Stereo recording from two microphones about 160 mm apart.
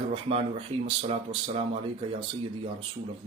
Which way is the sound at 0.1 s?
35° right (ahead or behind).